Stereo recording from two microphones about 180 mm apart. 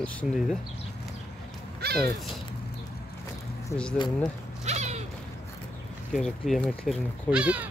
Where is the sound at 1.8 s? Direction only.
60° right (ahead or behind).